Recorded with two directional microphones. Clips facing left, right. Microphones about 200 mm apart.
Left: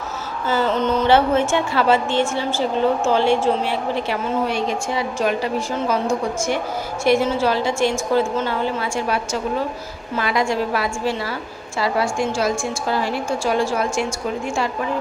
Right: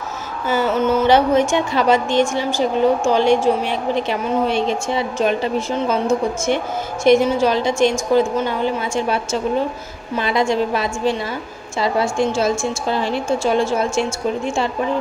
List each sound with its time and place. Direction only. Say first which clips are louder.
0.5 s a woman's voice: right 2 dB; 10° right (ahead or behind)